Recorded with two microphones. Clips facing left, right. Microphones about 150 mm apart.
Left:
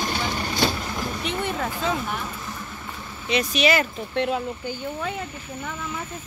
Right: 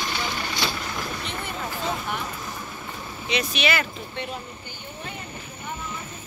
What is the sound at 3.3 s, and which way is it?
Speech, 40° left (ahead or behind).